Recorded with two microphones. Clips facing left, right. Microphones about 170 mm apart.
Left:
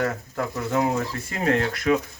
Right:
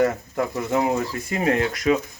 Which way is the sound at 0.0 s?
15° right (ahead or behind).